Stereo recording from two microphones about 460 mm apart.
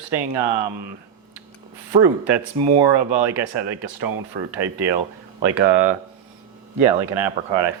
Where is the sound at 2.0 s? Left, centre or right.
Right.